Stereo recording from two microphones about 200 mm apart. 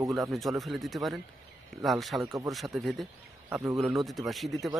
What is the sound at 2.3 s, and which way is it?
Speech, 15° right (ahead or behind).